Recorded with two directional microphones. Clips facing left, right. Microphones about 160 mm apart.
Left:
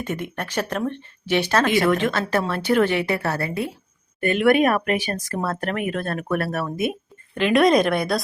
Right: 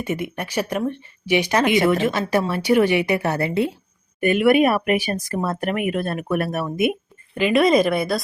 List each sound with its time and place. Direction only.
0.0 s speech: 10° right (ahead or behind)
4.2 s speech: 10° right (ahead or behind)
7.3 s speech: 5° right (ahead or behind)